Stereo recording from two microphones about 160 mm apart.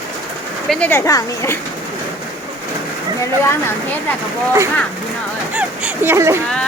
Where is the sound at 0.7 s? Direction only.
10° left (ahead or behind).